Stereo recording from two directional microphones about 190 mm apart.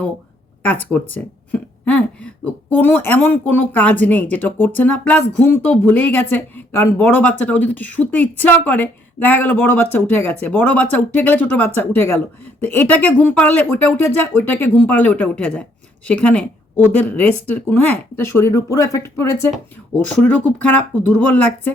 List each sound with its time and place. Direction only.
0.6 s speech: 10° left (ahead or behind)